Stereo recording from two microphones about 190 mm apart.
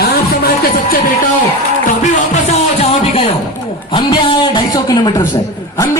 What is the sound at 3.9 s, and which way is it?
A man's voice, 25° left (ahead or behind).